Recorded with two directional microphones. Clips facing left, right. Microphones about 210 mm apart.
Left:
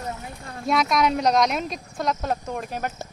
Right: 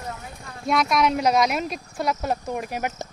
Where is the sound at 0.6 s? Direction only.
Centre (ahead or behind).